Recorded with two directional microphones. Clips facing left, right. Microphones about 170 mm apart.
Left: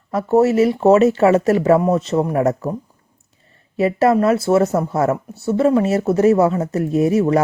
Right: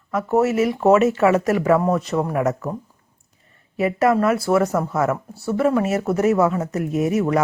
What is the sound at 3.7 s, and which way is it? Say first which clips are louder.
Speech: left 3 dB; 30° left (ahead or behind).